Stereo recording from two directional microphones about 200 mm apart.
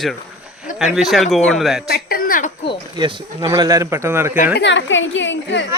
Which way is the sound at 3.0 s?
20° right (ahead or behind).